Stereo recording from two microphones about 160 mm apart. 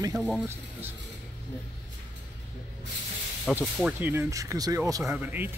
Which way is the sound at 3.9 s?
15° right (ahead or behind).